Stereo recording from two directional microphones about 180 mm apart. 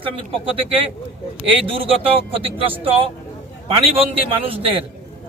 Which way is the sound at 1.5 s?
30° right (ahead or behind).